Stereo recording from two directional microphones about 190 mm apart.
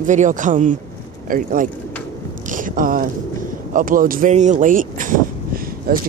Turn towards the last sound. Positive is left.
turn(degrees=-50)  # may be behind; listen again after turning